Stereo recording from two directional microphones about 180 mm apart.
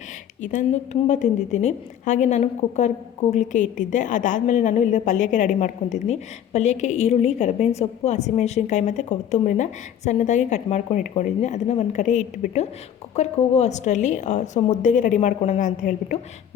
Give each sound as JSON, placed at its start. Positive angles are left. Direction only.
{"t": 0.4, "sound": "a woman's voice", "side_deg": 40}